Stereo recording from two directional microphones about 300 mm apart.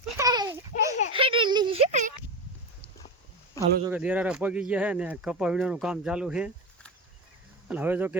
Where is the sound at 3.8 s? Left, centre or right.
Centre.